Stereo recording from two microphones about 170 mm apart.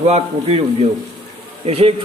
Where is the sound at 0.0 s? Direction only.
35° right (ahead or behind).